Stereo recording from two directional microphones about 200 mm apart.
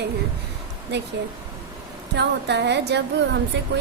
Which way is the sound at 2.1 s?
60° right (ahead or behind).